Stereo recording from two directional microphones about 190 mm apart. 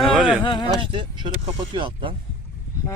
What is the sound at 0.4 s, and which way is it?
Speech, 25° left (ahead or behind).